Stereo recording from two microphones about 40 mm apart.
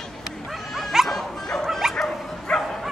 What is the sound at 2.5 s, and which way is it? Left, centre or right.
Bow-wow, centre.